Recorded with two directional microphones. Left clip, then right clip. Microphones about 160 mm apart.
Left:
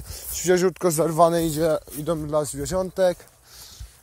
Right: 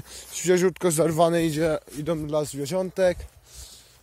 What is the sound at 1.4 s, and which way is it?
Speech, 15° right (ahead or behind).